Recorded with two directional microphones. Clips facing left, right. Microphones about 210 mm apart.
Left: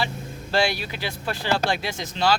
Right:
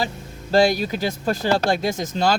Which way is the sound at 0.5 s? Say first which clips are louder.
Right 7 dB; 40° right (ahead or behind).